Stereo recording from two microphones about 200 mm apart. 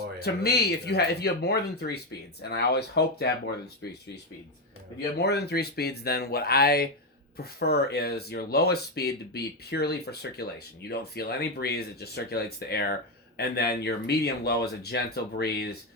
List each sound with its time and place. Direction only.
0.2 s speech: 55° left (ahead or behind)
5.2 s speech: 55° left (ahead or behind)